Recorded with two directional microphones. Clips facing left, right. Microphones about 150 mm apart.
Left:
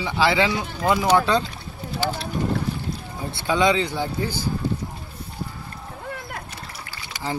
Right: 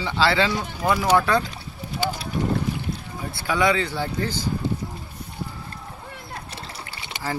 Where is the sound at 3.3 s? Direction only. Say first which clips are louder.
Left 2 dB; 25° left (ahead or behind).